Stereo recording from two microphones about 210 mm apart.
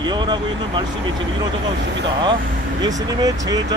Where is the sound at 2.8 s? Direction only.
15° right (ahead or behind).